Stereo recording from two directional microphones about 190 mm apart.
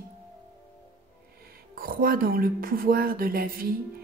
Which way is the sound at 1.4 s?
50° right (ahead or behind).